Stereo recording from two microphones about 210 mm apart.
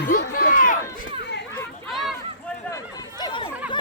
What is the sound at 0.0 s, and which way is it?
Run, 45° left (ahead or behind).